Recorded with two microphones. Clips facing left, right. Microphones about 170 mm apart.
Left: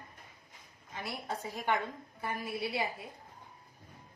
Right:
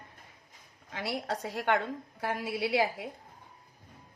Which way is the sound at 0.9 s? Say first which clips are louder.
Right 5 dB; 90° right.